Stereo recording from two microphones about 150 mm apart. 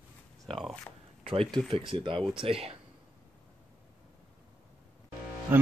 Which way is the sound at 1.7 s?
35° right (ahead or behind).